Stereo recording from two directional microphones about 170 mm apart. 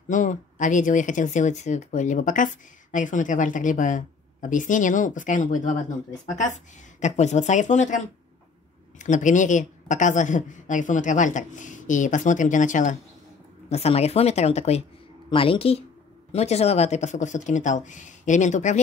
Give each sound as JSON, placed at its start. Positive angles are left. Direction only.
{"t": 0.1, "sound": "speech", "side_deg": 50}
{"t": 13.7, "sound": "speech", "side_deg": 40}